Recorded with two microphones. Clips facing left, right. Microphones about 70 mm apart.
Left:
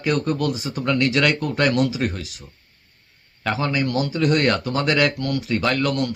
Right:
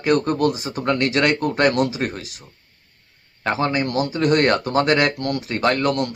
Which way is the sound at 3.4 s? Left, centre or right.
Right.